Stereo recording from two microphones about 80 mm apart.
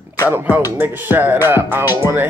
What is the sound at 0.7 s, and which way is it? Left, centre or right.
Speech, right.